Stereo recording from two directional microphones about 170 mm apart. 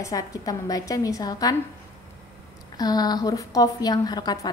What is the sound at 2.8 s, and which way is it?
A woman's voice, 25° left (ahead or behind).